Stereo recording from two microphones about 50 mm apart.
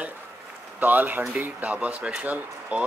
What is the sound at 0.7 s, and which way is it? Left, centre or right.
Speech, right.